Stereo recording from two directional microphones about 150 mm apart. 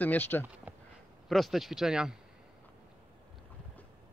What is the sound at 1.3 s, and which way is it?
Speech, centre (ahead or behind).